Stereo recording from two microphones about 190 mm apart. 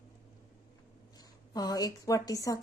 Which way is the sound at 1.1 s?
20° left (ahead or behind).